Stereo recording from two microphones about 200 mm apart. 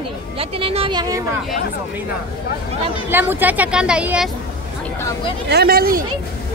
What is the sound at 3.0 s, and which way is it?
A woman's voice, 10° right (ahead or behind).